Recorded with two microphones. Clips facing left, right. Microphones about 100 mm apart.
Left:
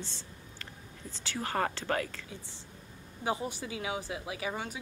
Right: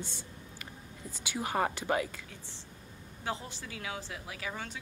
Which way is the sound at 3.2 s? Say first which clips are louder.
Left 5 dB; 15° left (ahead or behind).